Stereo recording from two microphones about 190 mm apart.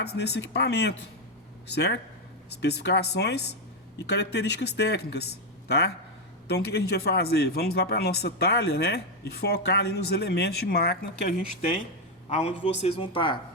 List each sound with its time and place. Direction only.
0.0 s a man's voice: 60° left (ahead or behind)
12.3 s a man's voice: 30° left (ahead or behind)